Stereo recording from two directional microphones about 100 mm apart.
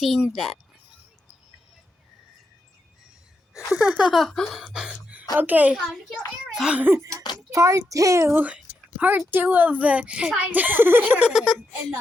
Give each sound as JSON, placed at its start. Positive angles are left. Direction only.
{"t": 0.0, "sound": "a child's voice", "side_deg": -5}
{"t": 3.5, "sound": "speech", "side_deg": -10}
{"t": 4.1, "sound": "a sound", "side_deg": 5}
{"t": 5.4, "sound": "speech", "side_deg": -15}
{"t": 5.7, "sound": "a child's voice", "side_deg": 0}
{"t": 6.8, "sound": "speech", "side_deg": -25}
{"t": 8.4, "sound": "speech", "side_deg": -15}
{"t": 11.1, "sound": "speech", "side_deg": -10}